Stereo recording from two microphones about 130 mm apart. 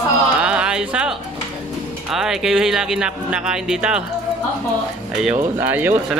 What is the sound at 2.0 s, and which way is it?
A man's voice, 5° right (ahead or behind).